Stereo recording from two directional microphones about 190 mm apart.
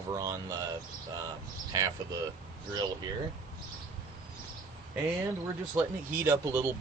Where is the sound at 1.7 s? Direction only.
20° right (ahead or behind).